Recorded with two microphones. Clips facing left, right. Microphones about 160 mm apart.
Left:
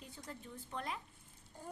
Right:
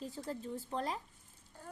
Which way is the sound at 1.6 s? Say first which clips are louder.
Left 1 dB; 15° left (ahead or behind).